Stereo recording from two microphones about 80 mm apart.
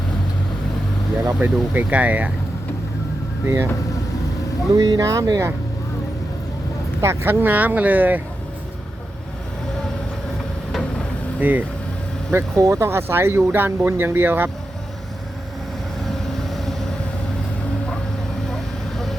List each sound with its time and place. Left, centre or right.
1.4 s speech: right
3.4 s speech: right
4.7 s speech: right
7.0 s speech: right
7.4 s speech: right
11.3 s speech: right
12.3 s speech: right
16.0 s vehicle: centre
18.4 s vehicle: centre